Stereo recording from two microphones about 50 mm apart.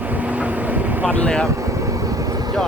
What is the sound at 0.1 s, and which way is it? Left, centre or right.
Vehicle, right.